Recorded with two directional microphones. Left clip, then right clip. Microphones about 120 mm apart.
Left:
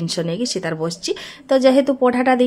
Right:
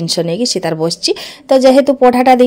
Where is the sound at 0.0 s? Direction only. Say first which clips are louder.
Right 8 dB; 35° right (ahead or behind).